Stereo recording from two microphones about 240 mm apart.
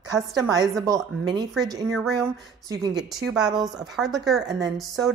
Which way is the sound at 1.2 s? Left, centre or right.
Centre.